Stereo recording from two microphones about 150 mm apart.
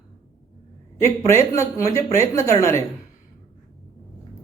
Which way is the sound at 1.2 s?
20° left (ahead or behind).